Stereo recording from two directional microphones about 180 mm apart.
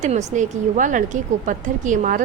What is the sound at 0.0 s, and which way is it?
A woman's voice, 40° right (ahead or behind).